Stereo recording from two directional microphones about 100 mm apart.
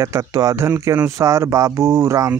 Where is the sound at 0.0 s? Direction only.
30° right (ahead or behind).